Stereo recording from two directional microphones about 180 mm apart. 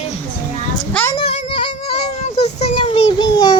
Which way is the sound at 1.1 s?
35° left (ahead or behind).